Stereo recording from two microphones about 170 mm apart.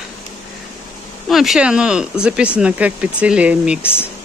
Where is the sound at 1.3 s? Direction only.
Centre (ahead or behind).